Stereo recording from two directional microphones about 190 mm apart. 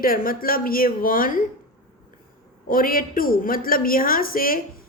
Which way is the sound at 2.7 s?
50° left (ahead or behind).